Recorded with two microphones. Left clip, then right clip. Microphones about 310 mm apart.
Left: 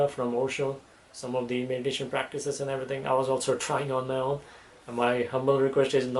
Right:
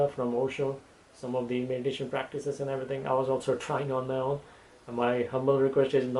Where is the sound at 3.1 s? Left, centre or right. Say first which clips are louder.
Left 2 dB; right.